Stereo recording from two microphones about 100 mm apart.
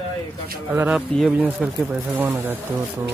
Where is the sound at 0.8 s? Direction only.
15° right (ahead or behind).